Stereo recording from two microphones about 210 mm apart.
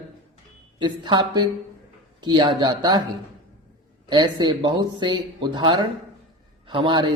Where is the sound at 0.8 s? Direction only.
20° right (ahead or behind).